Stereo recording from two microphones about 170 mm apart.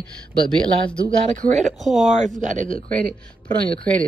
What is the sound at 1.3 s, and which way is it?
Speech, 45° right (ahead or behind).